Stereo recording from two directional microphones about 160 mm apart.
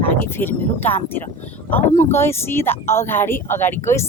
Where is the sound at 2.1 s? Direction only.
15° left (ahead or behind).